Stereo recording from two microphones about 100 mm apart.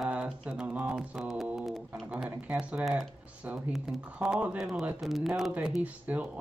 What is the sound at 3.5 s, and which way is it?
Speech, centre (ahead or behind).